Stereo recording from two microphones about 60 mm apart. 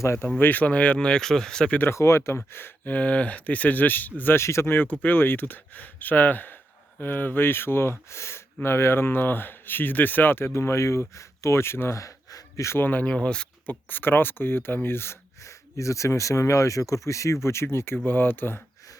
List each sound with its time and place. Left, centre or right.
0.3 s speech: left; by 1.7 s centre
1.9 s speech: left
2.9 s speech: left
4.4 s speech: left
11.9 s a sound: left
12.7 s speech: left
13.1 s speech: centre
13.7 s speech: left
15.4 s speech: left